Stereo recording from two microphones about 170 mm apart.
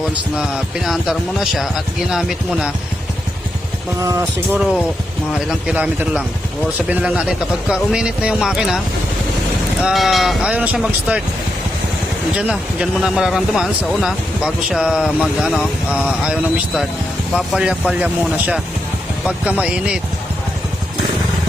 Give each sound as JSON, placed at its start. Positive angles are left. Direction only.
{"t": 0.9, "sound": "speech", "side_deg": 0}
{"t": 4.0, "sound": "speech", "side_deg": -15}
{"t": 9.8, "sound": "speech", "side_deg": 0}
{"t": 12.4, "sound": "speech", "side_deg": -5}